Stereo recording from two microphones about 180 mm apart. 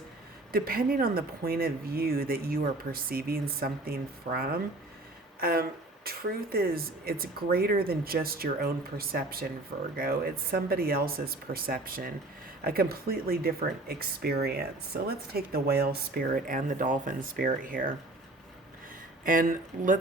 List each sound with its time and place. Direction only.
0.5 s speech: 55° right (ahead or behind)
19.2 s speech: 50° right (ahead or behind)